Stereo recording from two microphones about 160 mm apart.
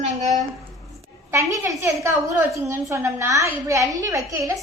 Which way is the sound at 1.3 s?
20° right (ahead or behind).